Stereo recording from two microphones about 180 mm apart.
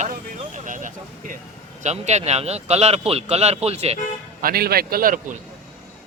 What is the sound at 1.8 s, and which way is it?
A man's voice, 40° right (ahead or behind).